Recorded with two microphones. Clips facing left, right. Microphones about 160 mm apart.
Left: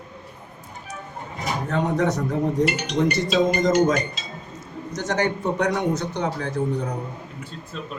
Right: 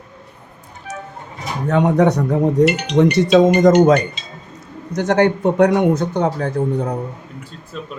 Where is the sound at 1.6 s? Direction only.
70° right (ahead or behind); by 6.9 s 55° right (ahead or behind).